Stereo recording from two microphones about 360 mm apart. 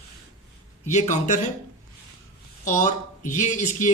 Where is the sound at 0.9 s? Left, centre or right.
Centre.